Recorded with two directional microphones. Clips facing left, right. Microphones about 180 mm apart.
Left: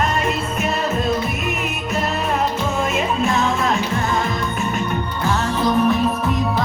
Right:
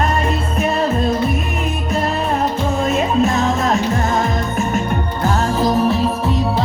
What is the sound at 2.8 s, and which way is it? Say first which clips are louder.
Music: right 5 dB; 40° right (ahead or behind).